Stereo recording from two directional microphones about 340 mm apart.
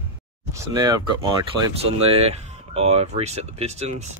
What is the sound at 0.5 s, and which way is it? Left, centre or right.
Speech, centre.